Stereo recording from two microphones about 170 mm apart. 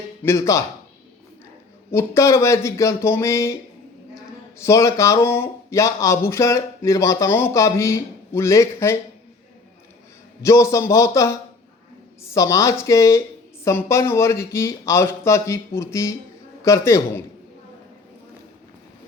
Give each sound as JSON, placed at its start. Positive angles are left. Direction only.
{"t": 0.2, "sound": "speech", "side_deg": 15}
{"t": 1.9, "sound": "speech", "side_deg": 15}
{"t": 4.6, "sound": "speech", "side_deg": 15}
{"t": 10.4, "sound": "speech", "side_deg": 15}